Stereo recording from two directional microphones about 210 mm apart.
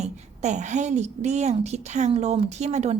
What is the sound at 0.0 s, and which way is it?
A woman's voice, 35° right (ahead or behind).